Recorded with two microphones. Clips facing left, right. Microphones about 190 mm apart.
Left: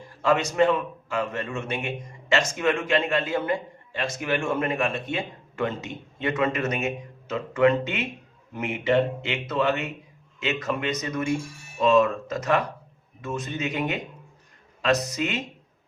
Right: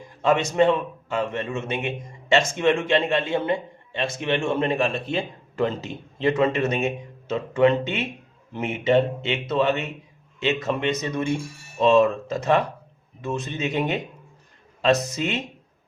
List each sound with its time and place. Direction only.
0.0 s a man's voice: 20° right (ahead or behind)